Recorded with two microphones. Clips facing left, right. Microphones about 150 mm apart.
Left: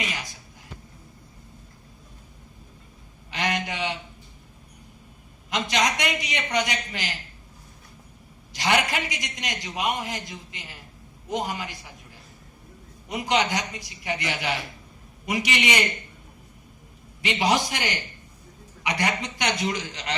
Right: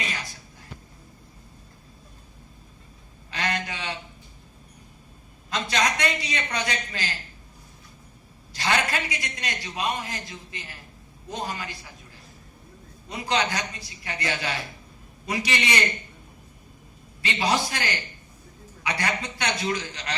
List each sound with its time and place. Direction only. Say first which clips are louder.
0.0 s a sound: left 1 dB; 15° left (ahead or behind)
3.3 s a sound: left 2 dB; 15° left (ahead or behind)
5.5 s a man's voice: left 1 dB; 15° left (ahead or behind)
8.5 s a man's voice: left 2 dB; 20° left (ahead or behind)
13.1 s a man's voice: left 2 dB; 20° left (ahead or behind)
17.2 s a man's voice: left 2 dB; 15° left (ahead or behind)